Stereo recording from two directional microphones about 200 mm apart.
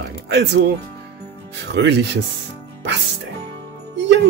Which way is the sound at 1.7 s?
60° right (ahead or behind).